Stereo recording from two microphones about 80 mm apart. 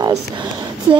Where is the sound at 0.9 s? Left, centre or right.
Right.